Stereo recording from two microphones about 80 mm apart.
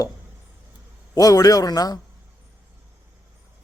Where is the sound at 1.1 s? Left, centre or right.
Left.